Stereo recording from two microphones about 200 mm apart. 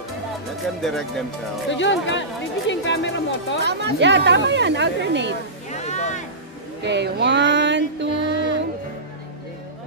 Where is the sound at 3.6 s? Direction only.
60° right (ahead or behind).